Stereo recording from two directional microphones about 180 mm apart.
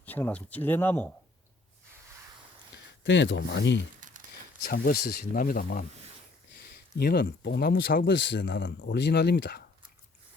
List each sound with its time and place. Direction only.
0.0 s speech: 10° left (ahead or behind)
3.0 s speech: 85° left
4.0 s crumpling: 45° right (ahead or behind)
4.7 s speech: 55° left (ahead or behind)
6.9 s speech: 60° left (ahead or behind)
8.1 s speech: 80° left